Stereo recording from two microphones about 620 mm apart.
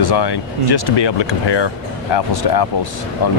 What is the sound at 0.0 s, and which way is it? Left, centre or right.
Speech, left.